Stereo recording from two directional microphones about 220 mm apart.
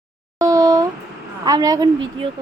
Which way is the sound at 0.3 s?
15° right (ahead or behind).